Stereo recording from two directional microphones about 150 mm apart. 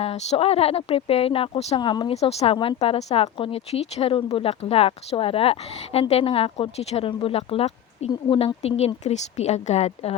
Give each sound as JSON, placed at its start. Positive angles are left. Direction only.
{"t": 0.0, "sound": "speech", "side_deg": 40}
{"t": 2.1, "sound": "speech", "side_deg": 40}